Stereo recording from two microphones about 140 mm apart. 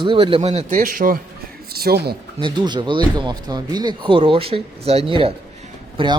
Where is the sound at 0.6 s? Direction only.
75° right (ahead or behind).